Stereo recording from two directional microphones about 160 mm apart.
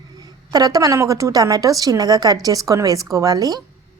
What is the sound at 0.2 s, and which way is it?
A woman's voice, 25° right (ahead or behind).